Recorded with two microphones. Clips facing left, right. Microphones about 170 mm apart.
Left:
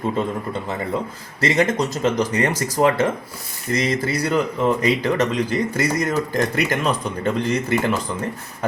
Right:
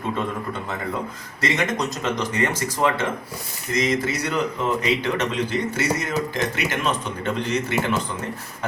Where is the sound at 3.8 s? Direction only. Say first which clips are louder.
Even; 35° left (ahead or behind).